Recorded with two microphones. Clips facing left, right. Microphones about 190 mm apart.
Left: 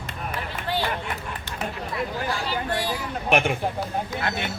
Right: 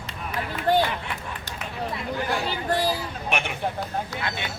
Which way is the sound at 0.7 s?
45° right (ahead or behind).